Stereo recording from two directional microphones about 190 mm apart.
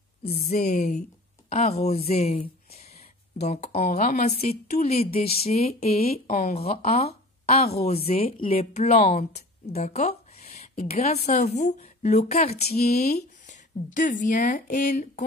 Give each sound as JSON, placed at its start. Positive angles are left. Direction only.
{"t": 0.2, "sound": "speech", "side_deg": 35}
{"t": 2.9, "sound": "a sound", "side_deg": 35}
{"t": 3.8, "sound": "speech", "side_deg": 45}
{"t": 5.9, "sound": "speech", "side_deg": 50}
{"t": 6.5, "sound": "a woman's voice", "side_deg": 35}